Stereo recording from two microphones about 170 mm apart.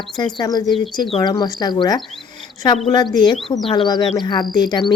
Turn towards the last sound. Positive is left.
turn(degrees=25)  # may be behind; listen again after turning